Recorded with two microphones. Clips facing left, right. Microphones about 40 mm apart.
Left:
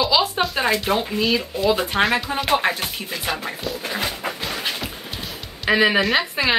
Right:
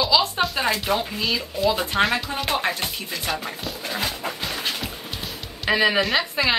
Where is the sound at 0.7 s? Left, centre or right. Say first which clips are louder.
Left 2 dB; centre.